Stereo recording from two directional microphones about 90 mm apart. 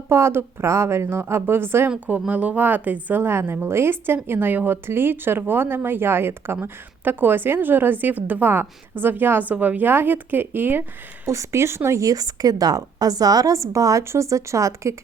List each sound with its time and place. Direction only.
0.1 s a woman's voice: 25° right (ahead or behind)
1.9 s a woman's voice: 15° right (ahead or behind)
11.3 s speech: 35° right (ahead or behind)